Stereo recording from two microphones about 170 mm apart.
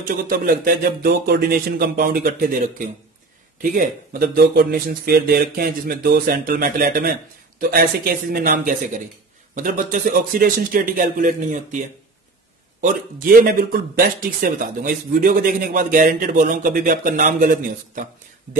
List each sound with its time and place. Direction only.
0.0 s speech: 55° right (ahead or behind)
12.8 s speech: 50° right (ahead or behind)